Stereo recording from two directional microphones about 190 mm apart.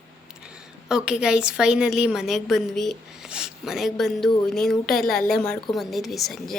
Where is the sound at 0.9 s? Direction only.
5° right (ahead or behind).